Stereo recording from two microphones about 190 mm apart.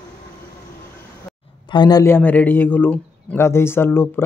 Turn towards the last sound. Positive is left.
turn(degrees=10)  # may be behind; listen again after turning